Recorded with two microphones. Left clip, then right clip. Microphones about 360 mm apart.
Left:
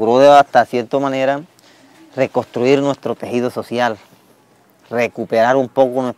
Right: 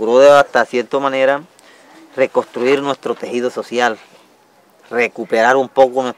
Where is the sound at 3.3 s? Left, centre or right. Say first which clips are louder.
Even; left.